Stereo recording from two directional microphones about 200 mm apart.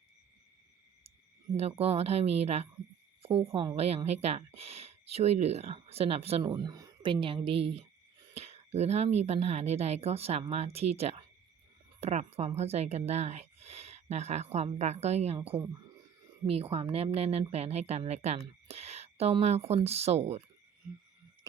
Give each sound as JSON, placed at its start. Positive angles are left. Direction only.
{"t": 1.5, "sound": "a woman's voice", "side_deg": -30}